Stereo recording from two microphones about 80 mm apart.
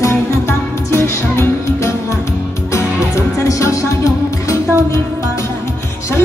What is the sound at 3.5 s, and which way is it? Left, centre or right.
Music, left.